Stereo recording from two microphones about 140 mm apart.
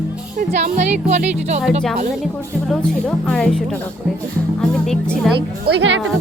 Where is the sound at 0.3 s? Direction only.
55° right (ahead or behind).